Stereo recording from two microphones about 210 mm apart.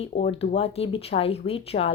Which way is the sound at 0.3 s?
30° left (ahead or behind).